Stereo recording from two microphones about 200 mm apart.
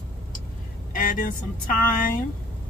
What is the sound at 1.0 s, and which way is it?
Speech, 40° left (ahead or behind).